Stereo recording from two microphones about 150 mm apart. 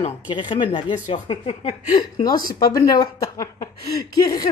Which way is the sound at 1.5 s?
45° left (ahead or behind).